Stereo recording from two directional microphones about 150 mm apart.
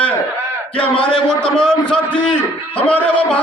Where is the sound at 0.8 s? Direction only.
5° left (ahead or behind).